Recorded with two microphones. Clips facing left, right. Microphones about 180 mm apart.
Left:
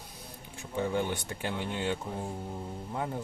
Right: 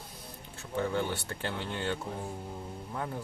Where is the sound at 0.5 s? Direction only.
15° left (ahead or behind).